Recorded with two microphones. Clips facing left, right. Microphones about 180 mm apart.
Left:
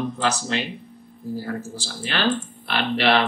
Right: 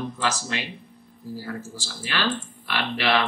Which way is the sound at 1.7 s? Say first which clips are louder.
Left 3 dB; 35° left (ahead or behind).